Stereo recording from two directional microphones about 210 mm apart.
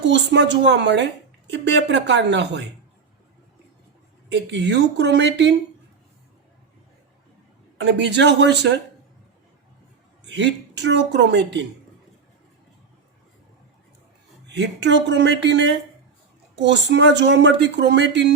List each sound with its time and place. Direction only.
0.0 s speech: 55° right (ahead or behind)
4.3 s speech: 55° right (ahead or behind)
7.8 s speech: 55° right (ahead or behind)
10.2 s speech: 55° right (ahead or behind)
14.4 s speech: 55° right (ahead or behind)